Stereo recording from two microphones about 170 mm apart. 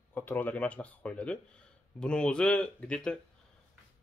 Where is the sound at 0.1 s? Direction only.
10° left (ahead or behind).